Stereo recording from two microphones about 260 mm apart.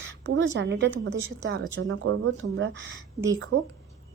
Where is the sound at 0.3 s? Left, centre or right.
Right.